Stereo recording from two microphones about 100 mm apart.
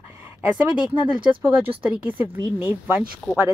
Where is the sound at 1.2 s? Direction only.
65° right (ahead or behind).